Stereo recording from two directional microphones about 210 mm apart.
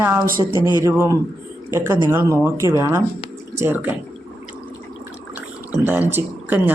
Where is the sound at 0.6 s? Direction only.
20° left (ahead or behind).